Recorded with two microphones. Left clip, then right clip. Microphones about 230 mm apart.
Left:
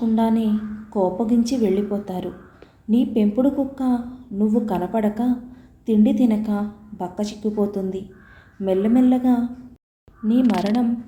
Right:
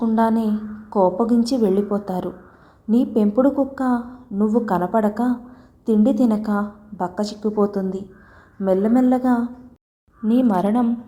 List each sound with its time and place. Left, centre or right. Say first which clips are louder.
0.0 s a woman's voice: right 2 dB; centre
9.0 s a woman's voice: right 1 dB; centre